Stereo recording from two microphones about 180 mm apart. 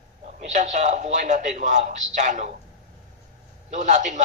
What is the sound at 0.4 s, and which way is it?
A man's voice, 45° right (ahead or behind).